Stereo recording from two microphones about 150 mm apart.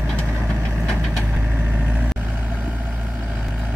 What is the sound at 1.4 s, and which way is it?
Vehicle, 10° right (ahead or behind).